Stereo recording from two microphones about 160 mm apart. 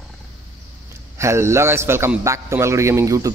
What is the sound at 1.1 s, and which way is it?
A man's voice, 15° right (ahead or behind).